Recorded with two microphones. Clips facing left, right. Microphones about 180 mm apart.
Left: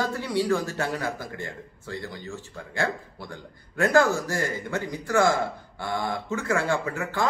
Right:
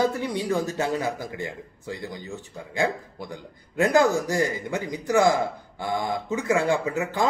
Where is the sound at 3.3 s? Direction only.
15° right (ahead or behind).